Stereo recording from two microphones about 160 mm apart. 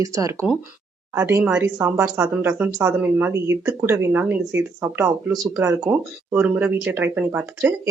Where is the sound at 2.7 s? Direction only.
20° right (ahead or behind).